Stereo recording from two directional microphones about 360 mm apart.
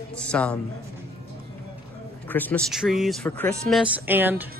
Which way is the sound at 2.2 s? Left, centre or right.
Centre.